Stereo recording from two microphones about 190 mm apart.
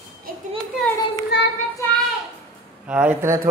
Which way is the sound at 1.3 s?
60° left (ahead or behind).